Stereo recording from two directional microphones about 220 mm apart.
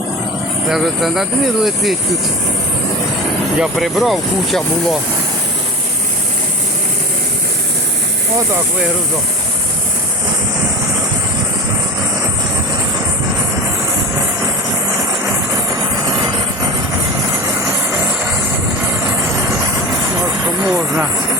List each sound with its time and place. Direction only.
0.7 s speech: centre (ahead or behind)
3.6 s speech: centre (ahead or behind)
16.0 s vehicle: 15° right (ahead or behind)
20.6 s a sound: 5° right (ahead or behind)